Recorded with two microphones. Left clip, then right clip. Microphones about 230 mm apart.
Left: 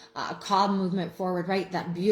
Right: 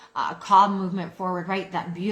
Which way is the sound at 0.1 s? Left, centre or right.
Centre.